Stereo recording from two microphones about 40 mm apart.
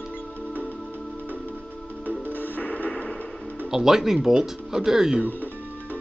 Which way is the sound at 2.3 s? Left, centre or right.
Left.